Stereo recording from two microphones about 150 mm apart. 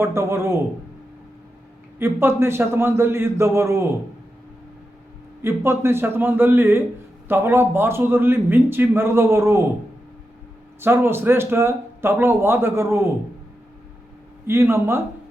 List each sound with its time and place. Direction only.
0.0 s a man's voice: 15° right (ahead or behind)
2.0 s a man's voice: 15° right (ahead or behind)
5.4 s a man's voice: 15° right (ahead or behind)
10.8 s a man's voice: 15° right (ahead or behind)
14.4 s a man's voice: 15° right (ahead or behind)